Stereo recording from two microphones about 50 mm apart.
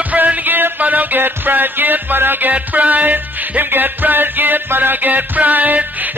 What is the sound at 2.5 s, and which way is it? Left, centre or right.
Music, right.